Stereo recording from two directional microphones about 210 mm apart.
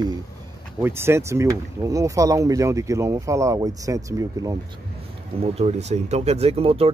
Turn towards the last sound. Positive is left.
turn(degrees=-30)  # may be behind; listen again after turning